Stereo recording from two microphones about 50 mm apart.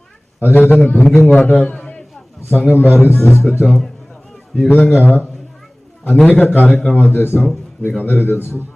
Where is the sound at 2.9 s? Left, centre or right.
Left.